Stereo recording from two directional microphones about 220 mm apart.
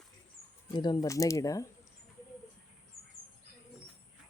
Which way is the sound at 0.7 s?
20° left (ahead or behind).